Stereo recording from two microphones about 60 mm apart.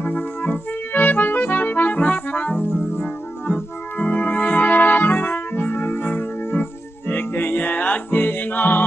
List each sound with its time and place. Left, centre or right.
0.0 s accordion: left